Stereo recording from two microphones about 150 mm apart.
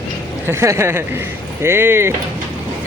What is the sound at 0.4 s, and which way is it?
Speech, 20° right (ahead or behind).